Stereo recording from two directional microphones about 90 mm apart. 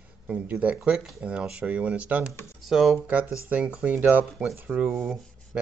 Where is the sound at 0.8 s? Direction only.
5° right (ahead or behind).